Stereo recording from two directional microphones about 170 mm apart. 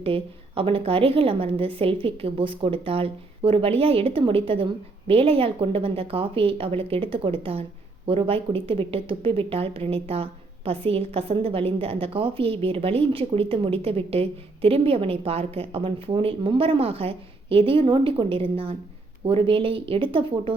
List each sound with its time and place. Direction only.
0.0 s speech: 35° right (ahead or behind)